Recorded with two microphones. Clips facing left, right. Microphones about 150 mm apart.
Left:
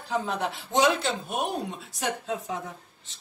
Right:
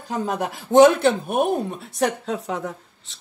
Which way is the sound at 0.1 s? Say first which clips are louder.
Right 3 dB; 50° right (ahead or behind).